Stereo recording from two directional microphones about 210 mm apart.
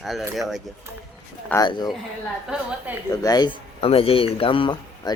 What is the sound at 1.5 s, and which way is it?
Speech, 20° left (ahead or behind).